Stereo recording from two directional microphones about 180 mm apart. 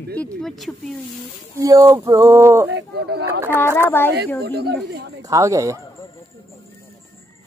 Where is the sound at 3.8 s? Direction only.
10° left (ahead or behind).